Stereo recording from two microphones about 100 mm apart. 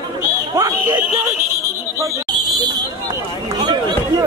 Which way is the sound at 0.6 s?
35° right (ahead or behind).